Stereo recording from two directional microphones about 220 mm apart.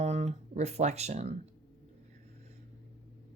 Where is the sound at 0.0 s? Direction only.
30° right (ahead or behind).